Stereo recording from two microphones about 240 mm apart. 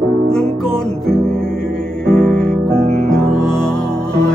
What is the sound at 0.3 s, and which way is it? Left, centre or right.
Music, centre.